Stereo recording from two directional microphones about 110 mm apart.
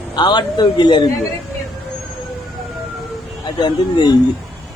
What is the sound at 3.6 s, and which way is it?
Speech, 40° left (ahead or behind).